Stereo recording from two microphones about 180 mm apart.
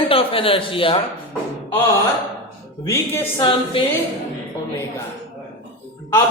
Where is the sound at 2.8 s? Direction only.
15° left (ahead or behind).